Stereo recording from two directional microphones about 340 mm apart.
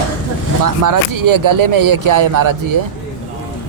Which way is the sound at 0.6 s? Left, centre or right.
Right.